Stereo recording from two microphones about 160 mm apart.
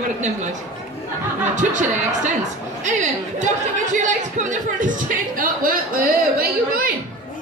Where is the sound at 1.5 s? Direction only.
50° right (ahead or behind).